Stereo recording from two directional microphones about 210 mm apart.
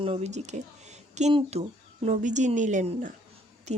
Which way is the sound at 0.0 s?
30° right (ahead or behind).